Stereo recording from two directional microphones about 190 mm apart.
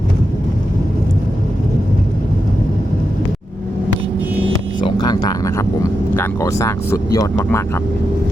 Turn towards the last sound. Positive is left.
turn(degrees=15)  # may be behind; listen again after turning